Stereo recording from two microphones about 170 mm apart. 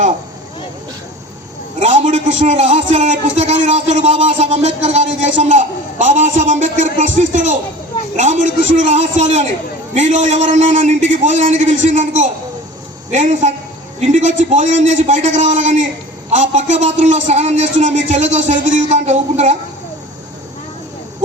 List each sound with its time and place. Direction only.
1.8 s a man's voice: 45° right (ahead or behind)